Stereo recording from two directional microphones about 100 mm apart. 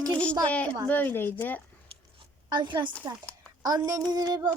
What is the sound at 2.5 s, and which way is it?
Speech, 50° right (ahead or behind).